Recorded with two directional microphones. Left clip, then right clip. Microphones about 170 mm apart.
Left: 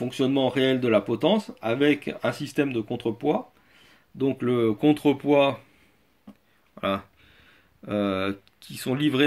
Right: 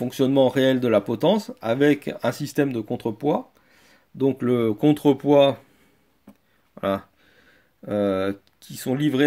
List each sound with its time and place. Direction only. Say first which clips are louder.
0.0 s speech: right 5 dB; 60° right (ahead or behind)
6.7 s a sound: right 2 dB; 50° right (ahead or behind)
7.8 s speech: right 4 dB; 50° right (ahead or behind)